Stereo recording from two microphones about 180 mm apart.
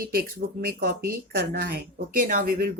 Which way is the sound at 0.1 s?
55° right (ahead or behind).